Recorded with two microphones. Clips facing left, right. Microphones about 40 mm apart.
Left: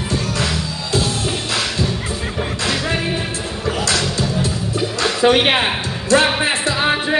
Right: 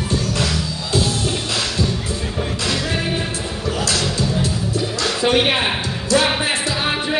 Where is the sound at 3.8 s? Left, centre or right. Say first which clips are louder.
Even; left.